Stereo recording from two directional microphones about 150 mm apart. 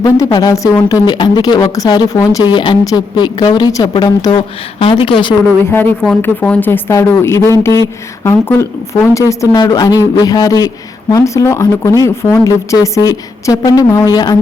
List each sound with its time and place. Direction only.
0.0 s speech: 25° left (ahead or behind)
5.7 s speech: 10° left (ahead or behind); by 14.3 s 25° left (ahead or behind)